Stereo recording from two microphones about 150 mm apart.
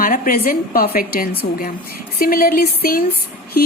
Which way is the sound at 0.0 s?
70° left (ahead or behind).